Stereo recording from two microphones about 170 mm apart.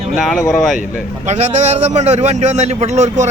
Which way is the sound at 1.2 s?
40° right (ahead or behind).